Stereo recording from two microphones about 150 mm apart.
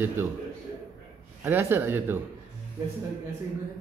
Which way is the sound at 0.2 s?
15° right (ahead or behind).